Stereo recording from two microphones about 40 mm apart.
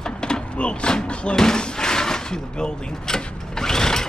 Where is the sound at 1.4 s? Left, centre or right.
Centre.